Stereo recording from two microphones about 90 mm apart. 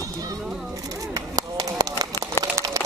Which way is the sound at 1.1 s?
45° right (ahead or behind).